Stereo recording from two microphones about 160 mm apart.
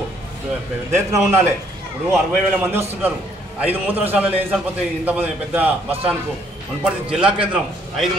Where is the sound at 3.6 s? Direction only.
10° right (ahead or behind).